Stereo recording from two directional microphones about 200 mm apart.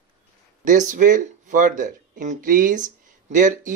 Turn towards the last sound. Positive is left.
turn(degrees=-40)  # may be behind; listen again after turning